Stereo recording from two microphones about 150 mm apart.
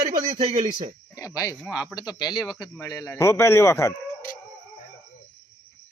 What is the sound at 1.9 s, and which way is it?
Speech, 25° left (ahead or behind).